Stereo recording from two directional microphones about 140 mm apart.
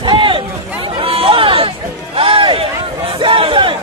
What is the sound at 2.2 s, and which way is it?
Crowd, 40° right (ahead or behind).